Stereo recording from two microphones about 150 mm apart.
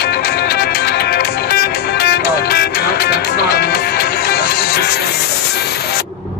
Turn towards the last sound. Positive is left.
turn(degrees=90)